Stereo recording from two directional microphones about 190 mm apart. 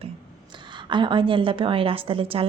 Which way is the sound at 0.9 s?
25° right (ahead or behind).